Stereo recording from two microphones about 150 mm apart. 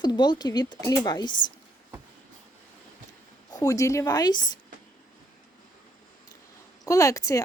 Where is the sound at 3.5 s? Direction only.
25° left (ahead or behind).